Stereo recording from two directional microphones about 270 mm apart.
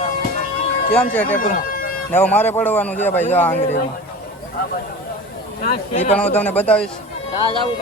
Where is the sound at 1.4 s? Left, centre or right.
Left.